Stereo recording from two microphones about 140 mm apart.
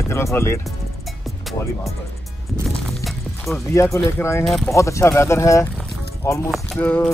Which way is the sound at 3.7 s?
20° left (ahead or behind).